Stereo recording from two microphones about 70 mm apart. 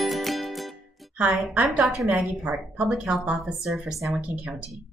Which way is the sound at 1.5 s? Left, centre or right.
Centre.